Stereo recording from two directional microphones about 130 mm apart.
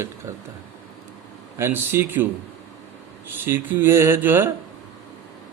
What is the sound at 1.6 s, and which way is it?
Speech, 20° right (ahead or behind).